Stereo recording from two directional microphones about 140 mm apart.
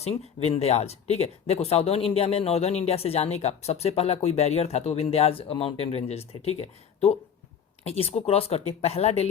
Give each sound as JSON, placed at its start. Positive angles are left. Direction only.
{"t": 0.0, "sound": "speech", "side_deg": 45}